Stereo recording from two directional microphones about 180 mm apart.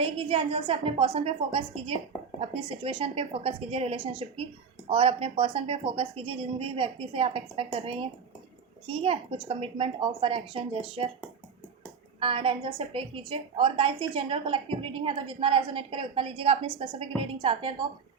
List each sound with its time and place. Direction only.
0.0 s a woman's voice: 30° right (ahead or behind)
12.2 s a woman's voice: 30° right (ahead or behind)